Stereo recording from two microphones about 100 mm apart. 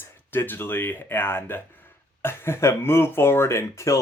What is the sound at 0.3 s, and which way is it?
Speech, 20° left (ahead or behind).